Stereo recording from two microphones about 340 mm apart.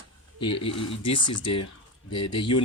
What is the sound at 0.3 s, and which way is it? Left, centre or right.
Speech, left.